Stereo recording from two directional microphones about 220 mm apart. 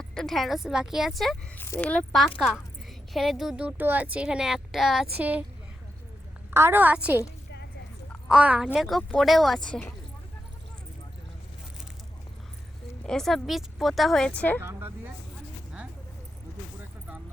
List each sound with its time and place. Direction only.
0.0 s a woman's voice: 5° left (ahead or behind)
6.5 s a woman's voice: 10° right (ahead or behind)
8.3 s a woman's voice: 5° right (ahead or behind)
13.1 s a woman's voice: centre (ahead or behind)
14.6 s a woman's voice: 10° right (ahead or behind)